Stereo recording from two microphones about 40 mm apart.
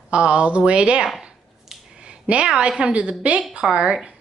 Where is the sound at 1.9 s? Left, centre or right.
Right.